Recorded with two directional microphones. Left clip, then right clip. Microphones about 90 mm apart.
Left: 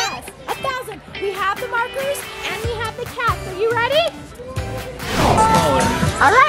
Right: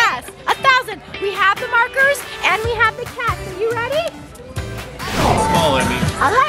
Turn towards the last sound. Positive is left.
turn(degrees=15)  # may be behind; listen again after turning